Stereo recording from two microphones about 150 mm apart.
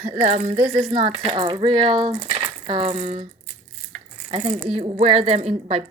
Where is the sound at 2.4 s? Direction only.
35° right (ahead or behind).